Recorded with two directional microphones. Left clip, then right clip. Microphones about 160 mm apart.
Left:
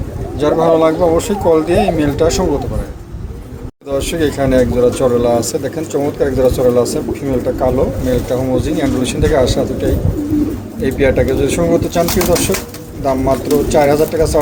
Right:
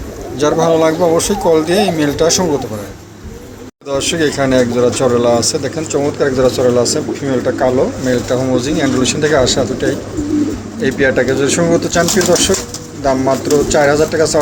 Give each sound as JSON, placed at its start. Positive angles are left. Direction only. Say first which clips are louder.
{"t": 0.3, "sound": "speech", "louder": "even", "side_deg": 5}
{"t": 3.8, "sound": "speech", "louder": "right 1 dB", "side_deg": 5}
{"t": 13.1, "sound": "speech", "louder": "right 1 dB", "side_deg": 5}